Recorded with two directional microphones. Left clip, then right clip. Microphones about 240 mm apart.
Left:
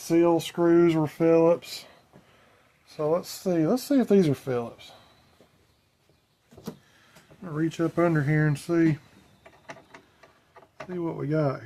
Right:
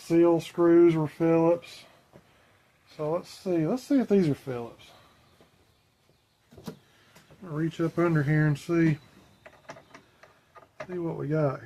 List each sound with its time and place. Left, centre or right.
0.1 s speech: left
2.9 s speech: left
7.4 s speech: left
10.9 s speech: left